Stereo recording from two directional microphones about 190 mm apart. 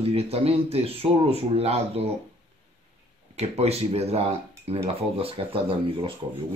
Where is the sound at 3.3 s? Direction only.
35° right (ahead or behind).